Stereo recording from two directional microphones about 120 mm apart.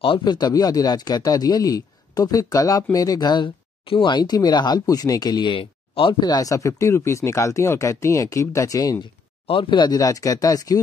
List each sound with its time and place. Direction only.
0.0 s speech: 40° left (ahead or behind)
9.5 s speech: 45° left (ahead or behind)